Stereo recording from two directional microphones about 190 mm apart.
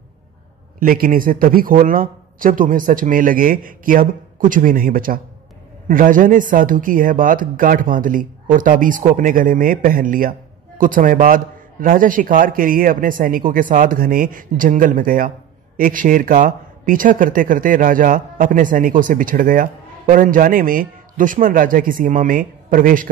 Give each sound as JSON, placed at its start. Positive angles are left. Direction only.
{"t": 0.7, "sound": "speech", "side_deg": -45}